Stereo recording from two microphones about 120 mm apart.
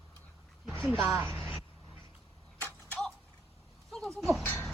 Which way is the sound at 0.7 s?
5° left (ahead or behind).